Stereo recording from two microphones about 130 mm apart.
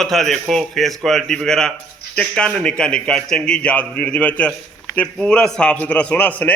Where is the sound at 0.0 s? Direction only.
Centre (ahead or behind).